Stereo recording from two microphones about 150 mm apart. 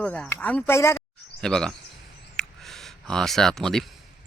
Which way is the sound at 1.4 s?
5° left (ahead or behind).